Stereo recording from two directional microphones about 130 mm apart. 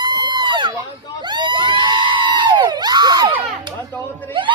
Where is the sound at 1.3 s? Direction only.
35° right (ahead or behind).